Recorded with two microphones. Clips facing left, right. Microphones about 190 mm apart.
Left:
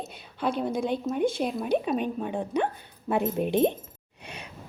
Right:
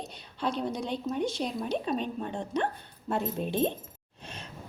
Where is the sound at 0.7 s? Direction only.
50° left (ahead or behind).